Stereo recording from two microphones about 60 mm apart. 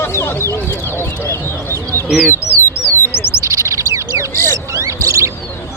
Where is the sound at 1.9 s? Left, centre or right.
Left.